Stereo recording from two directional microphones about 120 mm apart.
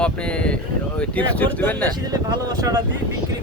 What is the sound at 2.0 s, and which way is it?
Speech, 30° right (ahead or behind).